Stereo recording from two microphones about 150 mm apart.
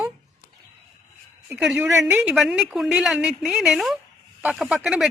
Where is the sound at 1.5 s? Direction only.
5° right (ahead or behind).